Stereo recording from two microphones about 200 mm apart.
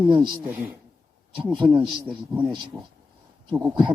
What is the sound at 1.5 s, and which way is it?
Speech, 25° right (ahead or behind).